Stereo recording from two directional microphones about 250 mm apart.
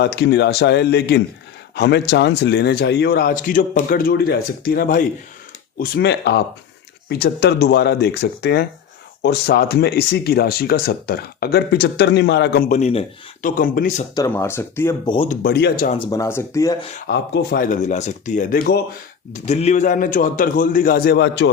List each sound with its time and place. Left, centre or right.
0.0 s speech: left
14.2 s speech: centre
15.4 s speech: left
16.0 s speech: centre
16.9 s speech: left